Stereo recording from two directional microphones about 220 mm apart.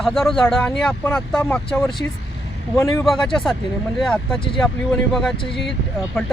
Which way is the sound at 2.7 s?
15° left (ahead or behind).